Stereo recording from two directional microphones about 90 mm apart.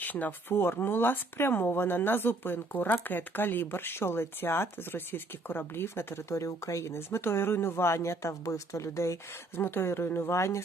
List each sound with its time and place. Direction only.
0.0 s speech: 20° left (ahead or behind)